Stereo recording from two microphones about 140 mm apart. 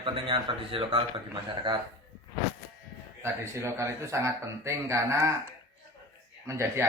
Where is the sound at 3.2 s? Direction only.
20° right (ahead or behind).